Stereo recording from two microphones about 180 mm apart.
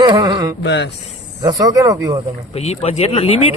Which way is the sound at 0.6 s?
90° left.